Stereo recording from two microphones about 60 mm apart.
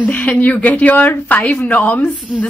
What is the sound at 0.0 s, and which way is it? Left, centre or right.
Speech, left.